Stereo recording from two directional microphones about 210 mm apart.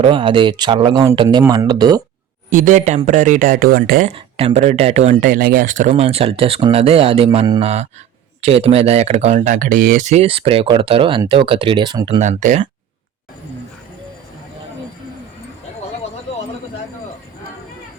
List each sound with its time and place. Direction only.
0.0 s speech: 25° right (ahead or behind)
2.5 s speech: 40° right (ahead or behind)
4.1 s speech: 30° right (ahead or behind)
12.2 s speech: 35° right (ahead or behind)